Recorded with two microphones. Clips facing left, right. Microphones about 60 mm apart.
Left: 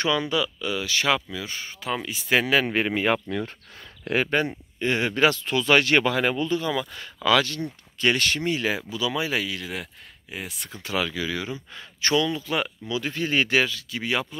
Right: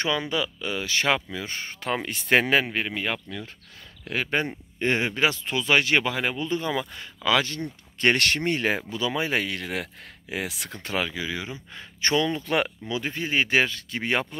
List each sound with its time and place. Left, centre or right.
0.0 s speech: right
2.0 s speech: right
2.9 s speech: left
4.3 s speech: right
4.7 s speech: right
5.1 s speech: centre
6.5 s speech: right
8.0 s speech: right
10.3 s speech: right
10.8 s speech: right
11.1 s speech: centre
12.4 s speech: right
12.8 s speech: right